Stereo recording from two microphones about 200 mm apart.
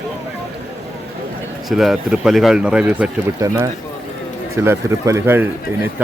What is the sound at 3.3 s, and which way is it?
Speech, 15° right (ahead or behind).